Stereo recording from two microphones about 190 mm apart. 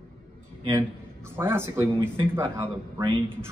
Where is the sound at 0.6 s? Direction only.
20° right (ahead or behind).